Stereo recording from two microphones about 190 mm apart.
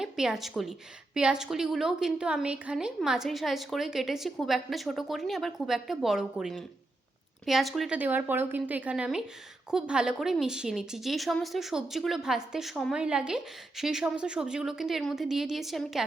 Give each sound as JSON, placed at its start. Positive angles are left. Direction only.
{"t": 0.0, "sound": "a woman's voice", "side_deg": -5}